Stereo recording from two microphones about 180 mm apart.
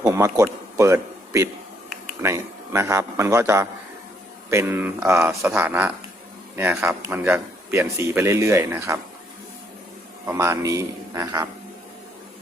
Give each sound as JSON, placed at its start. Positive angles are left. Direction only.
{"t": 0.0, "sound": "a man's voice", "side_deg": -15}
{"t": 10.3, "sound": "a man's voice", "side_deg": -15}